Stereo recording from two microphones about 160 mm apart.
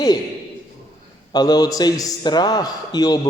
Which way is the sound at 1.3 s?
25° left (ahead or behind).